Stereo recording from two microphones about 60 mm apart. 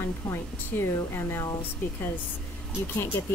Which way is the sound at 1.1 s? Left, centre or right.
Left.